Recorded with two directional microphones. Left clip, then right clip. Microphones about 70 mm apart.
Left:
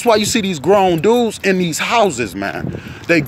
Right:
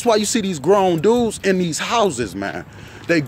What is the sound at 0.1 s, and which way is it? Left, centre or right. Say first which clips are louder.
Speech: left 4 dB; right.